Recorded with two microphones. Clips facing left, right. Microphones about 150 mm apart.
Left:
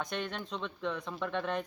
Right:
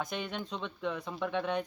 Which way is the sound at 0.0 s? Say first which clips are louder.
Even; centre (ahead or behind).